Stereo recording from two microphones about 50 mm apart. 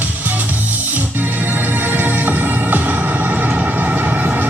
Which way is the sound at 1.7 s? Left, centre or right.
Right.